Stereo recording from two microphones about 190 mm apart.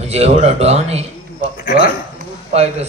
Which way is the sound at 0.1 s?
35° right (ahead or behind).